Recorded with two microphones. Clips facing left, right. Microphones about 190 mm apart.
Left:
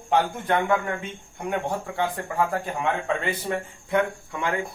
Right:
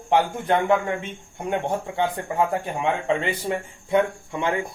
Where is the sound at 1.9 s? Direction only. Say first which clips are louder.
Right 2 dB; 20° right (ahead or behind).